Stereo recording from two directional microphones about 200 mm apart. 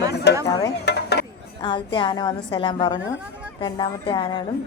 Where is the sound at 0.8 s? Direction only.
55° left (ahead or behind).